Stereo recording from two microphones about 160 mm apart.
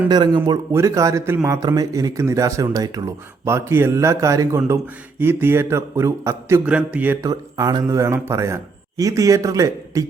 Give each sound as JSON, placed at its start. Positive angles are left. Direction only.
{"t": 0.1, "sound": "a man's voice", "side_deg": -25}
{"t": 7.3, "sound": "a man's voice", "side_deg": -25}